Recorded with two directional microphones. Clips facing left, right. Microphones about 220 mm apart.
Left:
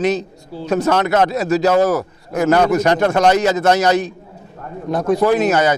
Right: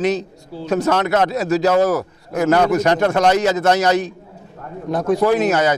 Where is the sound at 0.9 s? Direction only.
20° left (ahead or behind).